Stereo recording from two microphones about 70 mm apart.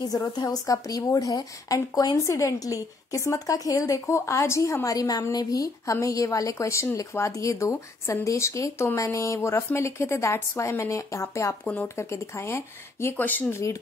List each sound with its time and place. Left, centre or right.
0.0 s a woman's voice: left
2.2 s speech: left
11.6 s speech: left
12.0 s speech: left
13.2 s speech: left